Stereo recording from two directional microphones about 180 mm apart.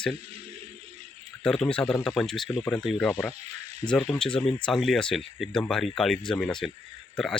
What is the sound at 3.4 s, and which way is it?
Snake, 35° right (ahead or behind).